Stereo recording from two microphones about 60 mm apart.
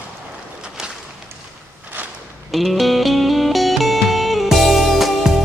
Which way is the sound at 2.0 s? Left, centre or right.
Right.